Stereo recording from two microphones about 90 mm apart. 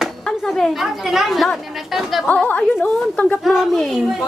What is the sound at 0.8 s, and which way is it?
A woman's voice, 5° right (ahead or behind).